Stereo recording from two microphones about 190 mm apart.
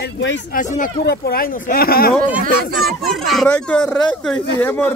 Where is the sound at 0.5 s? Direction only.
45° left (ahead or behind).